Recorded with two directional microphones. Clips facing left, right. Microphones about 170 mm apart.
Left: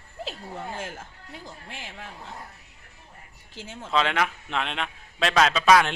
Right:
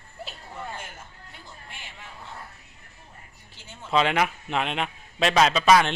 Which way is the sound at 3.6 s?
90° left.